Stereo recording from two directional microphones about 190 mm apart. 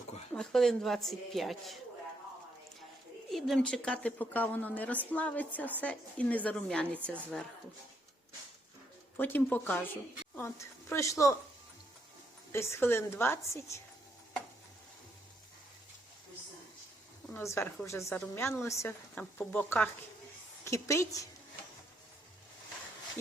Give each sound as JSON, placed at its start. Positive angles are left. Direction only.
{"t": 0.3, "sound": "a woman's voice", "side_deg": 0}
{"t": 3.3, "sound": "a woman's voice", "side_deg": 0}
{"t": 9.1, "sound": "a woman's voice", "side_deg": 10}
{"t": 12.5, "sound": "a woman's voice", "side_deg": 15}
{"t": 17.2, "sound": "a woman's voice", "side_deg": 15}